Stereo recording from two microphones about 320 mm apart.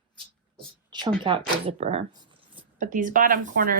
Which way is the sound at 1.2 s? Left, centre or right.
Centre.